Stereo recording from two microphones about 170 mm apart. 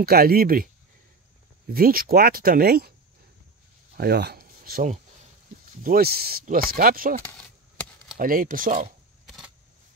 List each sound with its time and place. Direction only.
0.0 s speech: 60° right (ahead or behind)
1.7 s speech: 60° right (ahead or behind)
3.9 s a sound: 65° right (ahead or behind)
5.9 s speech: 65° right (ahead or behind)
7.2 s chop: 10° left (ahead or behind)
8.2 s speech: 55° right (ahead or behind)
9.2 s a sound: centre (ahead or behind)